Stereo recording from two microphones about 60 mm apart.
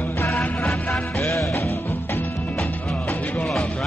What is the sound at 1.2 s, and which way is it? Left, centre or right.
Music, left.